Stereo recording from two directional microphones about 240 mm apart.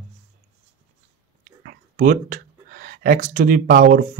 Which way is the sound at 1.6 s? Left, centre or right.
Right.